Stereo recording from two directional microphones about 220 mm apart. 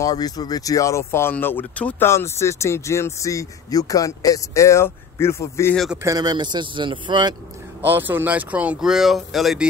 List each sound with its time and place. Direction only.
0.0 s speech: 15° left (ahead or behind)
6.0 s a man's voice: 20° right (ahead or behind)
7.8 s speech: 10° right (ahead or behind)